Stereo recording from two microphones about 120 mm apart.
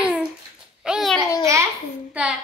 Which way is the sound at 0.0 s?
10° right (ahead or behind).